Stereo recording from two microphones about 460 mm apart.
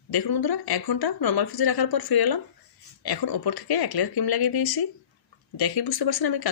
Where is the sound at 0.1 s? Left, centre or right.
Left.